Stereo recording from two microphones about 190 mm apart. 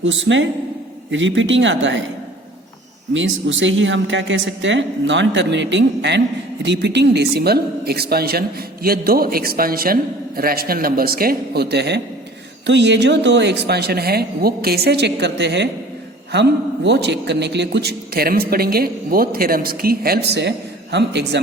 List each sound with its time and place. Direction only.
0.0 s speech: 75° right (ahead or behind)
3.1 s a man's voice: 80° right; by 21.4 s 65° right (ahead or behind)